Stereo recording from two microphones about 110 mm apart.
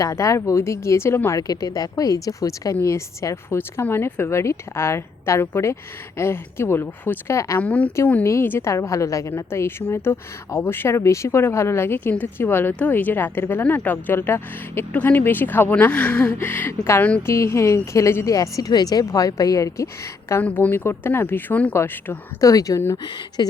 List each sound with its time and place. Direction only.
0.0 s a woman's voice: 30° left (ahead or behind)
1.4 s a woman's voice: 35° left (ahead or behind)
7.6 s a woman's voice: 10° left (ahead or behind)
22.4 s a woman's voice: 30° left (ahead or behind)
23.0 s speech: 45° left (ahead or behind)